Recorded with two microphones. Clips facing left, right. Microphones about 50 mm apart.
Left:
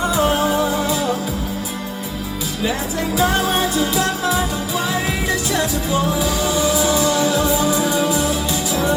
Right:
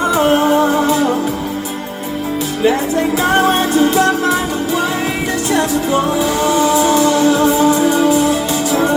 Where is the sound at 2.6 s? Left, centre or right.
Right.